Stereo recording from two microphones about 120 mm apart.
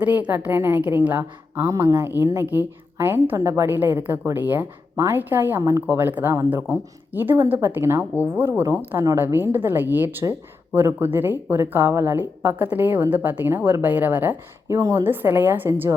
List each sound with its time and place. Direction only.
0.0 s a woman's voice: 10° right (ahead or behind)